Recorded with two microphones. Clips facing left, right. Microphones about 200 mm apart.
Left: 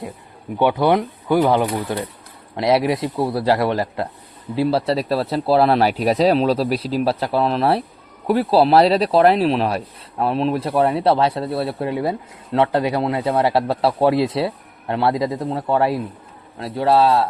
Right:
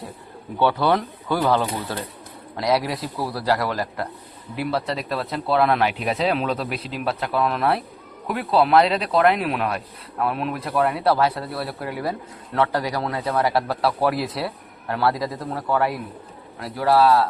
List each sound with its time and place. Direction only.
0.6 s speech: 15° left (ahead or behind)